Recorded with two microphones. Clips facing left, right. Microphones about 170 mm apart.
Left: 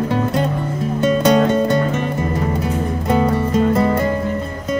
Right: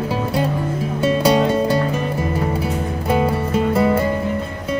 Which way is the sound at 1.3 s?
10° right (ahead or behind).